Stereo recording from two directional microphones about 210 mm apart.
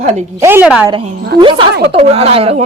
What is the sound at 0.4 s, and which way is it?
Speech, 10° right (ahead or behind).